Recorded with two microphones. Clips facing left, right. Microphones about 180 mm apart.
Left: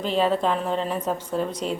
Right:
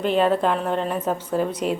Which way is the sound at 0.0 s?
Centre (ahead or behind).